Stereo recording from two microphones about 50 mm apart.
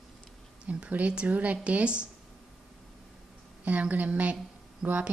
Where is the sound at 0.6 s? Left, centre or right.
Right.